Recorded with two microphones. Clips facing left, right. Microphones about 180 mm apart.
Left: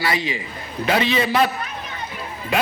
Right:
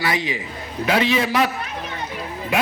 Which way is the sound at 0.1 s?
15° right (ahead or behind).